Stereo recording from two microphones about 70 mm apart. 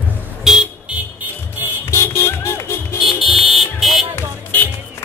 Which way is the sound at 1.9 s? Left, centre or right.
Left.